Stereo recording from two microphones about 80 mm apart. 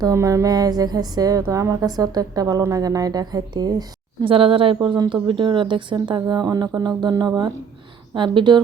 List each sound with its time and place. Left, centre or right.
0.0 s a woman's voice: right
6.1 s speech: right
8.1 s speech: right